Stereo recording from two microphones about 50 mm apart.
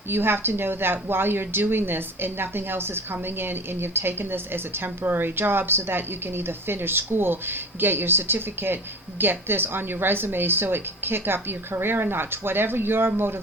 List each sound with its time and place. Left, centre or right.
0.1 s a woman's voice: right